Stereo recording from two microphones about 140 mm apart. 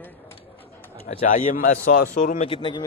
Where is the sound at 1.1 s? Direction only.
65° left (ahead or behind); by 2.4 s 80° left.